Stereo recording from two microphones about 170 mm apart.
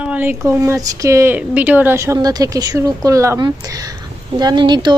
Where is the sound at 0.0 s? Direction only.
10° right (ahead or behind).